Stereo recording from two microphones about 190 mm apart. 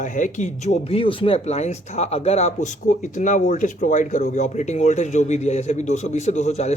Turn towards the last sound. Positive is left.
turn(degrees=35)  # may be behind; listen again after turning